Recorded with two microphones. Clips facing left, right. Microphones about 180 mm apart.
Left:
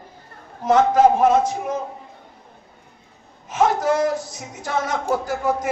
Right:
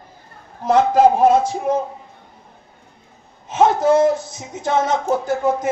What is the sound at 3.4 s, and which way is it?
A man's voice, 25° right (ahead or behind).